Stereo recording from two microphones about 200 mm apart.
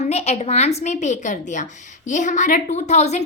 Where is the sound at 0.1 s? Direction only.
30° left (ahead or behind).